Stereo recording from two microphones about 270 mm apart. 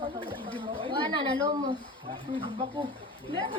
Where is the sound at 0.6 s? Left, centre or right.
Centre.